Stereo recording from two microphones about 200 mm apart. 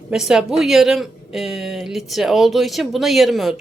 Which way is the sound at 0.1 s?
Centre (ahead or behind).